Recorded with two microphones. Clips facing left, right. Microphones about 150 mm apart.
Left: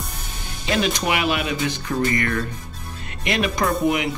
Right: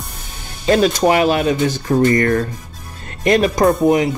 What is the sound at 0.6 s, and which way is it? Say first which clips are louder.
Speech: right 9 dB; 40° right (ahead or behind).